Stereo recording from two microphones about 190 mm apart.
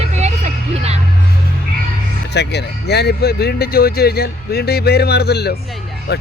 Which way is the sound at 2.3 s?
60° left (ahead or behind).